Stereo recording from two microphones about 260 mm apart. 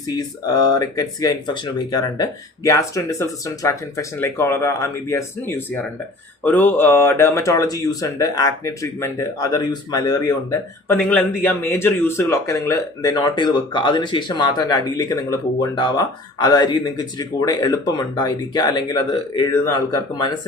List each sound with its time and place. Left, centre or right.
0.1 s speech: centre